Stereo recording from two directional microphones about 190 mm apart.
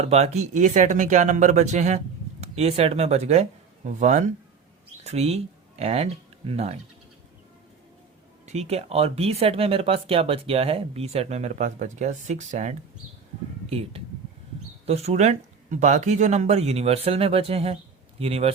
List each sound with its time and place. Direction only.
0.0 s speech: 35° right (ahead or behind)
8.4 s speech: 35° right (ahead or behind)